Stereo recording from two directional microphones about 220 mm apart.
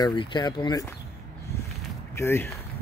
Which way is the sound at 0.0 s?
20° left (ahead or behind).